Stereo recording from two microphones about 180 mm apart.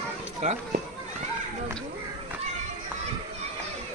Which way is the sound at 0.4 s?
40° right (ahead or behind).